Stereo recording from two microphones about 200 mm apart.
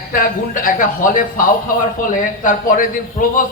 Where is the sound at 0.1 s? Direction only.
45° left (ahead or behind).